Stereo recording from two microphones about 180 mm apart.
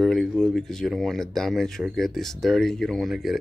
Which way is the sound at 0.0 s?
Centre (ahead or behind).